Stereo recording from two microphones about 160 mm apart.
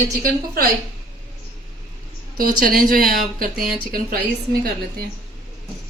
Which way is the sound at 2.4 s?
65° right (ahead or behind).